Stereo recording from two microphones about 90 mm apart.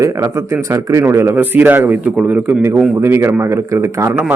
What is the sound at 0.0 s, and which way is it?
Speech, 30° right (ahead or behind).